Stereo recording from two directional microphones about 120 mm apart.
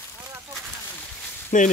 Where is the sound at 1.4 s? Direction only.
90° left.